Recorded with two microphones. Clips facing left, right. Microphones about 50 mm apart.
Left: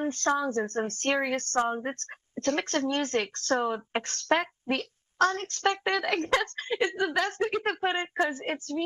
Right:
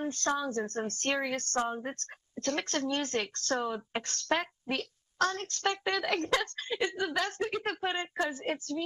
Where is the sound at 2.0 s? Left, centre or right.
Left.